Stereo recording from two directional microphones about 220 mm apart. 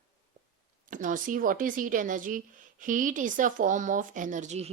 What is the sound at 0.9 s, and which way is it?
Speech, 35° right (ahead or behind).